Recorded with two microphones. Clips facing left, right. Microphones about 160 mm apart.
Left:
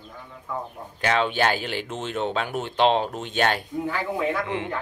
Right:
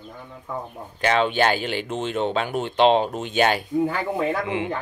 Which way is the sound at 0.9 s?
Centre (ahead or behind).